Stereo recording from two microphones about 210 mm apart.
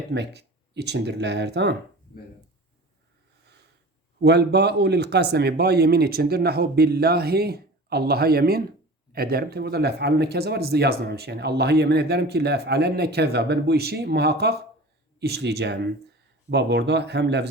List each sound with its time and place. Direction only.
0.1 s speech: 55° right (ahead or behind)
4.2 s speech: 55° right (ahead or behind)